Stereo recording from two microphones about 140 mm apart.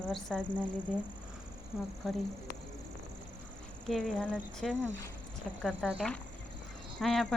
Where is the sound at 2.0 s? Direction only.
Centre (ahead or behind).